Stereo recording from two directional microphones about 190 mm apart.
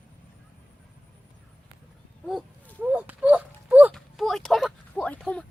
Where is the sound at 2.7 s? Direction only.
10° right (ahead or behind).